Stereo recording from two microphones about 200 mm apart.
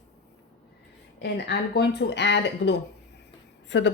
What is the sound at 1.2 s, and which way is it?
A woman's voice, 55° left (ahead or behind).